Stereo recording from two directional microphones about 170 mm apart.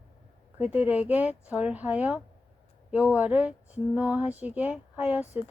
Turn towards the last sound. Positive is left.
turn(degrees=-10)  # may be behind; listen again after turning